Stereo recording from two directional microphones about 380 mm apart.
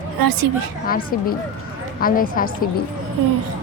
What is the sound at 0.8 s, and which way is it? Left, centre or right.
A child's voice, left.